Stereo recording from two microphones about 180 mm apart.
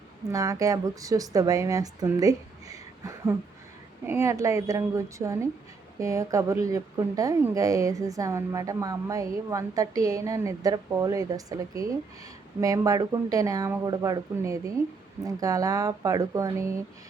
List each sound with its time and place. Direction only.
0.3 s a woman's voice: 20° right (ahead or behind)